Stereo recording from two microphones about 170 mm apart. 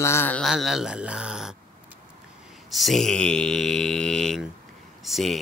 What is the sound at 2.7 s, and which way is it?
Speech, centre (ahead or behind).